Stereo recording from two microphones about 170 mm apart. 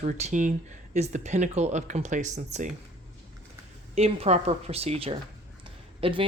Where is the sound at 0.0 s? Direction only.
45° right (ahead or behind).